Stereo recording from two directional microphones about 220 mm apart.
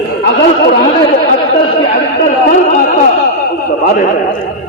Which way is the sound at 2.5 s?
40° left (ahead or behind).